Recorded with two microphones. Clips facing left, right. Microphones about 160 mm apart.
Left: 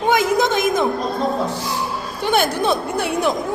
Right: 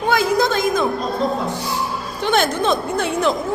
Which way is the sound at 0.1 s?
20° left (ahead or behind).